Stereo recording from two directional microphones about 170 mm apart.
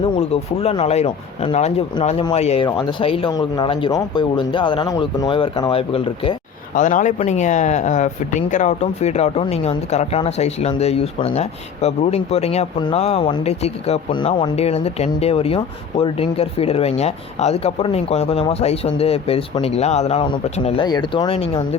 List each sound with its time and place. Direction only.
0.0 s speech: 35° left (ahead or behind)
6.7 s speech: 45° left (ahead or behind)